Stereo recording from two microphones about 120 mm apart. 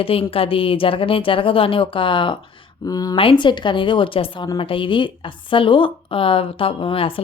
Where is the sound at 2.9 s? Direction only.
30° left (ahead or behind).